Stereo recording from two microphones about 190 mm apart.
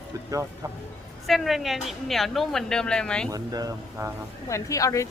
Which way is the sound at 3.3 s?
20° right (ahead or behind).